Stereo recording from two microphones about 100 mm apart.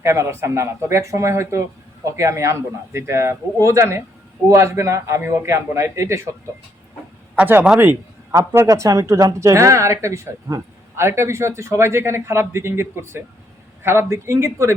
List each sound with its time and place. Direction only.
0.0 s speech: 30° right (ahead or behind)
7.3 s a man's voice: 15° right (ahead or behind)